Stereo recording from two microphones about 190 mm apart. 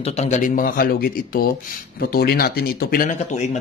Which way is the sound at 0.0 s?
35° left (ahead or behind).